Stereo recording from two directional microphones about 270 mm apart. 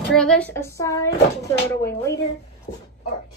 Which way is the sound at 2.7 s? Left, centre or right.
Left.